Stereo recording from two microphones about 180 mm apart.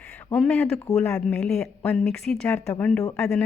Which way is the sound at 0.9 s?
15° left (ahead or behind).